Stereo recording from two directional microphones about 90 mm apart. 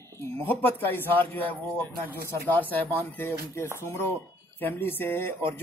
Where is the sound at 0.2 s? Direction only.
20° left (ahead or behind).